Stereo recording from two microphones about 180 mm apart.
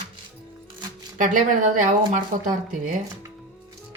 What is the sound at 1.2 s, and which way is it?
A woman's voice, 45° right (ahead or behind).